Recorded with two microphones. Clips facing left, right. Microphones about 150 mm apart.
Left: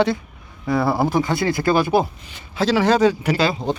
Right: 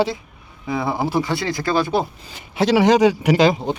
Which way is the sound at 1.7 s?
15° left (ahead or behind).